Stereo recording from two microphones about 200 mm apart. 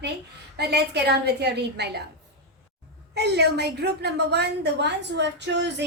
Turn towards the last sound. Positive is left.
turn(degrees=-60)  # may be behind; listen again after turning